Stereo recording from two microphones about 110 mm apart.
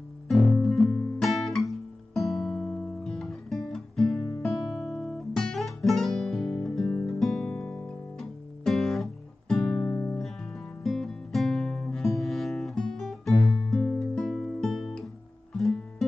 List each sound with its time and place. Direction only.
0.3 s guitar: centre (ahead or behind)
9.8 s music: 15° left (ahead or behind)
10.8 s music: 5° left (ahead or behind)